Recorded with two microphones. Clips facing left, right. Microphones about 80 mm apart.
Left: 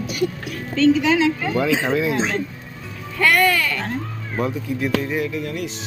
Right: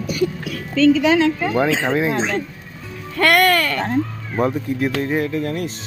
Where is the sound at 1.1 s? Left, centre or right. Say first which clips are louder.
Right 2 dB; right.